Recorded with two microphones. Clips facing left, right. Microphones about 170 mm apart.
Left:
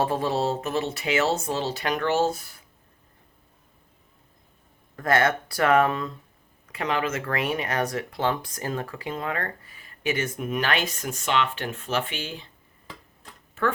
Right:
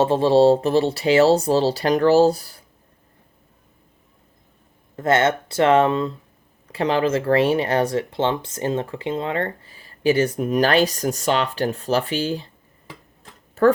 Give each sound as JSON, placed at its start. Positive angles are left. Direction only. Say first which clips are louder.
{"t": 0.0, "sound": "speech", "louder": "right 10 dB", "side_deg": -30}
{"t": 4.9, "sound": "speech", "louder": "right 4 dB", "side_deg": -25}
{"t": 13.6, "sound": "speech", "louder": "right 11 dB", "side_deg": -40}